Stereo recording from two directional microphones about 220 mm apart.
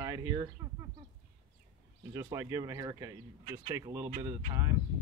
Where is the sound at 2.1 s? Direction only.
15° right (ahead or behind).